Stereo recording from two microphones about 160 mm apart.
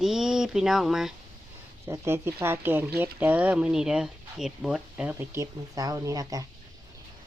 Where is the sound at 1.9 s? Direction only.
15° right (ahead or behind).